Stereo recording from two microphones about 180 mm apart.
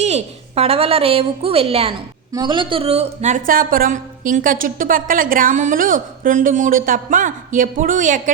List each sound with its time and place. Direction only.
0.0 s a woman's voice: 35° right (ahead or behind)